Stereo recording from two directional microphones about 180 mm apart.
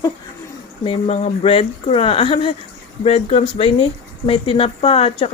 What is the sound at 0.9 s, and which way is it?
Speech, 35° left (ahead or behind).